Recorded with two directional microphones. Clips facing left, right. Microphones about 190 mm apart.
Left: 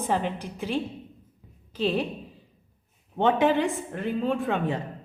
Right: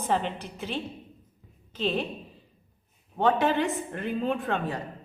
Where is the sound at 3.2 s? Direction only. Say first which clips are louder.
Left 2 dB; 20° left (ahead or behind).